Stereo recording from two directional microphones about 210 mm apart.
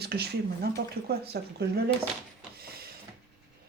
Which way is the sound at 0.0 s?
50° right (ahead or behind).